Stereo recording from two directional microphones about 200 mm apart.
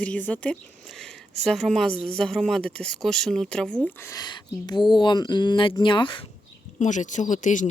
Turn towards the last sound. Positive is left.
turn(degrees=40)  # may be behind; listen again after turning